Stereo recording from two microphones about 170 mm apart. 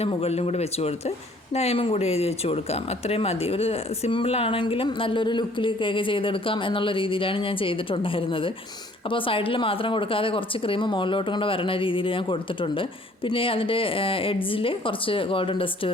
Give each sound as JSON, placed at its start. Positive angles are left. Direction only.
{"t": 0.0, "sound": "speech", "side_deg": 35}